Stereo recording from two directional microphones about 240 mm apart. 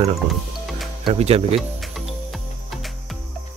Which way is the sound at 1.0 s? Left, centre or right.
Right.